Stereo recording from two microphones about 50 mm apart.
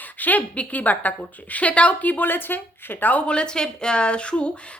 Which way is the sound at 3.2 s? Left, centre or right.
Centre.